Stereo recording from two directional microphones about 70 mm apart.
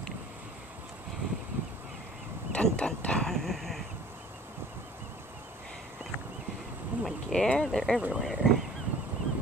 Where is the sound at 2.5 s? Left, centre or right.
Centre.